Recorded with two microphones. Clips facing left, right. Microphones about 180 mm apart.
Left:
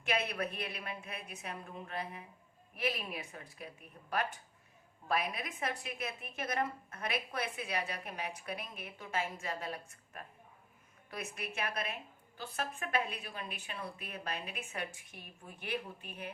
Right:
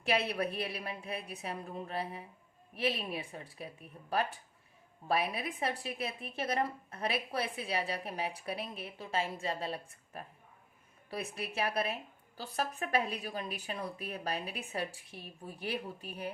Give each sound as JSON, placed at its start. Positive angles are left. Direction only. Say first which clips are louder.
{"t": 0.0, "sound": "a woman's voice", "louder": "right 3 dB", "side_deg": -35}